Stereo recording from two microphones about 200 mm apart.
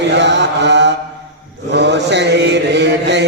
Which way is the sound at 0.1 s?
60° right (ahead or behind).